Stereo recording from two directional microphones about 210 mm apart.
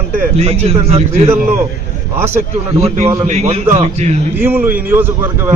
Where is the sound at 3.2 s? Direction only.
30° right (ahead or behind).